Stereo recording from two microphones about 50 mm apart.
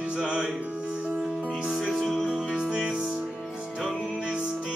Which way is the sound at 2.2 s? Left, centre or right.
Centre.